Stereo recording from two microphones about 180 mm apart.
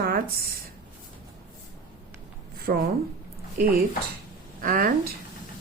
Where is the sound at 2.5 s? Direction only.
55° right (ahead or behind).